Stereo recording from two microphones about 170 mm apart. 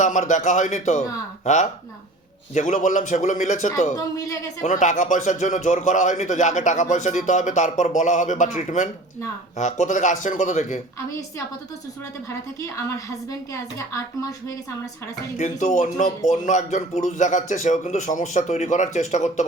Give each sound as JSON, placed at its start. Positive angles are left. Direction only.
{"t": 0.0, "sound": "speech", "side_deg": 45}
{"t": 3.9, "sound": "a woman's voice", "side_deg": 20}
{"t": 4.6, "sound": "speech", "side_deg": 45}
{"t": 12.6, "sound": "a woman's voice", "side_deg": 20}
{"t": 15.4, "sound": "speech", "side_deg": 45}